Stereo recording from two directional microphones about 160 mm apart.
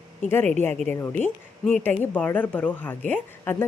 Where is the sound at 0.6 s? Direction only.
10° left (ahead or behind).